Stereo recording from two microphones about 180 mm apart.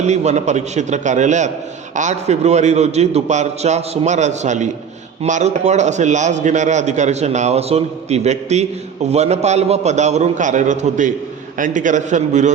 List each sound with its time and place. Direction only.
0.0 s a man's voice: 40° right (ahead or behind)